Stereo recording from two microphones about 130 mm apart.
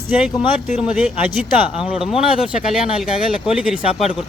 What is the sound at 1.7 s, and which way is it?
Speech, 45° left (ahead or behind).